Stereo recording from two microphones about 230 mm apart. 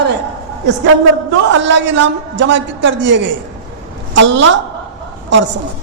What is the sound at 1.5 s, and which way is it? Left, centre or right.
A man's voice, right.